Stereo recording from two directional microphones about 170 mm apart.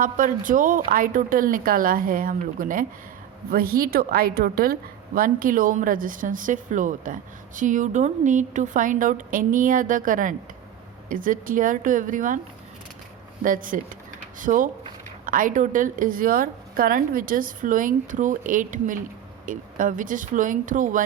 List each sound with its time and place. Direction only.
0.0 s a woman's voice: 50° right (ahead or behind)
13.4 s a woman's voice: 50° right (ahead or behind)